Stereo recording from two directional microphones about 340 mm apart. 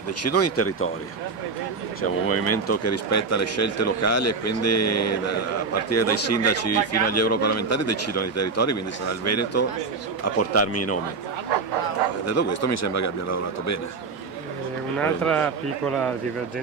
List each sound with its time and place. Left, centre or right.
0.2 s speech: left
2.0 s speech: left
12.3 s speech: left
15.0 s speech: centre